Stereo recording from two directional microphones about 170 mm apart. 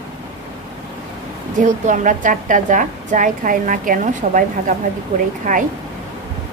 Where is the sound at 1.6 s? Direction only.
50° right (ahead or behind).